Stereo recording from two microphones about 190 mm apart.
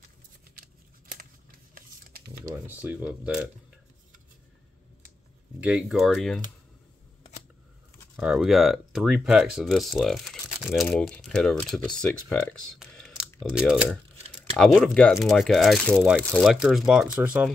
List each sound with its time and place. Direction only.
1.8 s a sound: 50° right (ahead or behind)
2.6 s speech: 10° right (ahead or behind)
5.6 s speech: 5° right (ahead or behind)
8.2 s speech: 5° right (ahead or behind)
14.3 s speech: 5° left (ahead or behind)